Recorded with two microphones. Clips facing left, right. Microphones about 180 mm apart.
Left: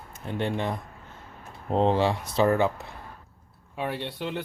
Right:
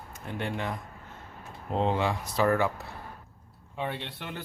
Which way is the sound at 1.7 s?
30° left (ahead or behind).